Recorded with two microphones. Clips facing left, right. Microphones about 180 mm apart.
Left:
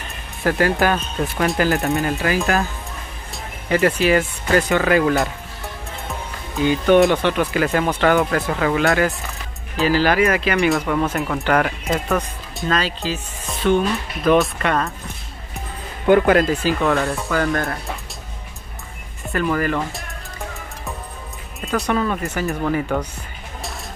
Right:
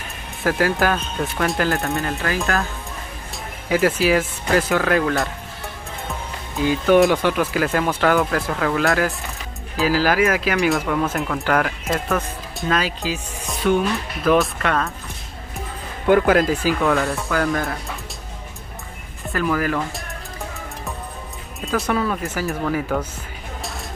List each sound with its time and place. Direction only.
0.4 s speech: centre (ahead or behind)
1.8 s speech: 15° left (ahead or behind)
3.6 s speech: 5° right (ahead or behind)
6.5 s speech: centre (ahead or behind)
16.1 s speech: centre (ahead or behind)
19.2 s speech: centre (ahead or behind)
21.5 s speech: centre (ahead or behind)